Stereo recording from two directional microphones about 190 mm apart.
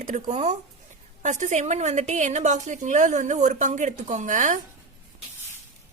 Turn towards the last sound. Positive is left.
turn(degrees=-40)  # may be behind; listen again after turning